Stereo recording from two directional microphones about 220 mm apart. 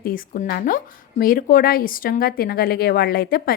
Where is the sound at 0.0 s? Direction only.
40° left (ahead or behind).